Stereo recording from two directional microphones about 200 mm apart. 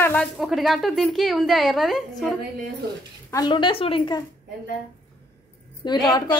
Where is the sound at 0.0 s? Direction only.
5° left (ahead or behind).